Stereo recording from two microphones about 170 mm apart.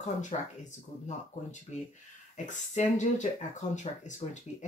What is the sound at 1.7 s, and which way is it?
Speech, 45° left (ahead or behind).